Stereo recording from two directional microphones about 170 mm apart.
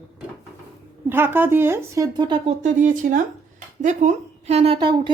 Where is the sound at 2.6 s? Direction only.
45° right (ahead or behind).